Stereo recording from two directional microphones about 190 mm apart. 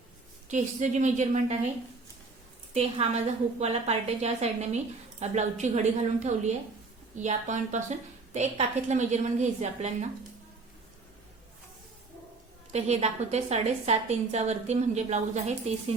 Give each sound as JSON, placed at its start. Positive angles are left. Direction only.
{"t": 0.4, "sound": "a woman's voice", "side_deg": -40}
{"t": 2.7, "sound": "a woman's voice", "side_deg": -35}
{"t": 12.7, "sound": "a woman's voice", "side_deg": -35}